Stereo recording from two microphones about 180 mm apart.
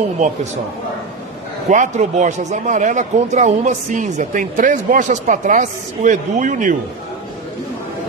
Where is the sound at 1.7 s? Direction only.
40° right (ahead or behind).